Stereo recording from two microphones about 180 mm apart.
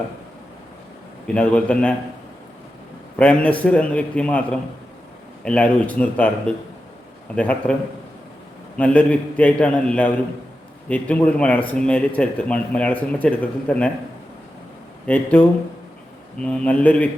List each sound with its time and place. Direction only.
1.3 s speech: 5° left (ahead or behind)
3.2 s speech: 5° left (ahead or behind)
5.5 s speech: 5° left (ahead or behind)
8.8 s speech: 5° left (ahead or behind)
15.0 s speech: 10° left (ahead or behind)